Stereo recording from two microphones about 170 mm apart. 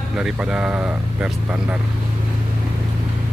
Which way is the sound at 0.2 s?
5° right (ahead or behind).